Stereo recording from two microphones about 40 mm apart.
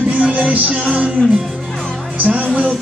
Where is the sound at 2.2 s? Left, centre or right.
Right.